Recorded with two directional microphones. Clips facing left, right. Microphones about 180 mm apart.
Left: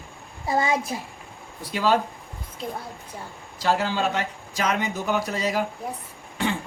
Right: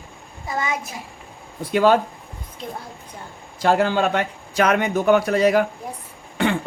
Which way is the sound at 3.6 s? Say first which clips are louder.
Right 5 dB; 55° right (ahead or behind).